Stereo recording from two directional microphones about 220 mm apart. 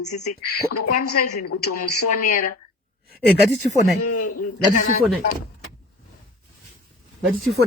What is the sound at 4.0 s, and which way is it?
Speech, 90° left.